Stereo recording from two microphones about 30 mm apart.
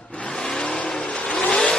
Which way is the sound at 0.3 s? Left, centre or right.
Left.